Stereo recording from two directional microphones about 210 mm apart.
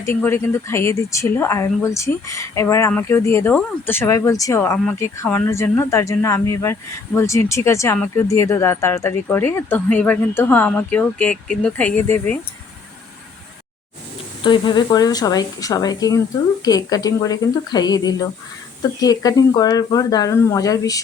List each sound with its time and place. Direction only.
0.0 s speech: 10° left (ahead or behind)
14.4 s speech: 20° left (ahead or behind)